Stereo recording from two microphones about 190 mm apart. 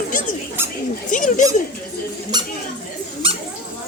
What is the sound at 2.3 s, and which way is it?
Squeak, 20° right (ahead or behind).